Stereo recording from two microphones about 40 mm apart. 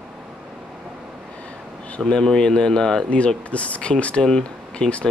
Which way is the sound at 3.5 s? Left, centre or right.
Left.